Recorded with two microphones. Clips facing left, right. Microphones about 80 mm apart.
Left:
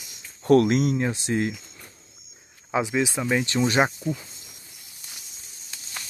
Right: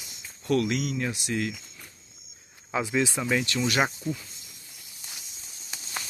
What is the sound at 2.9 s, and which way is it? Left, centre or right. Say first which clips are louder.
Speech: right 1 dB; centre.